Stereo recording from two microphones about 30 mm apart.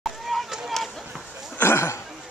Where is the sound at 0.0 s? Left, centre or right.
Centre.